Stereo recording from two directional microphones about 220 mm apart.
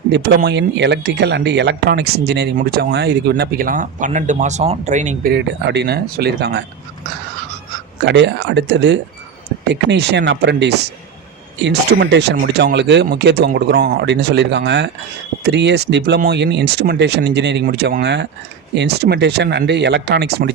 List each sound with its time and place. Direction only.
0.1 s speech: 50° right (ahead or behind); by 5.3 s 35° right (ahead or behind)
5.3 s speech: 50° right (ahead or behind)
8.0 s speech: 50° right (ahead or behind)